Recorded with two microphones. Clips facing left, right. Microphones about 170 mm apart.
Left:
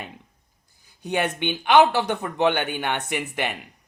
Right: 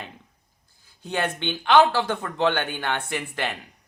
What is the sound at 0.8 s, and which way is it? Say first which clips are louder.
Speech: left 2 dB; 15° left (ahead or behind).